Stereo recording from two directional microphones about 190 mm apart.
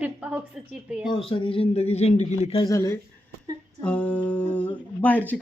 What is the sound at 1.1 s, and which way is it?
Speech, 25° left (ahead or behind).